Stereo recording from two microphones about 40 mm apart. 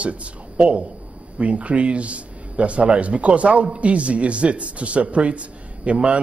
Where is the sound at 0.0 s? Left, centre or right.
Right.